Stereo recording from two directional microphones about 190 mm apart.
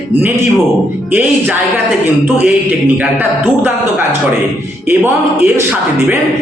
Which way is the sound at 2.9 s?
10° right (ahead or behind).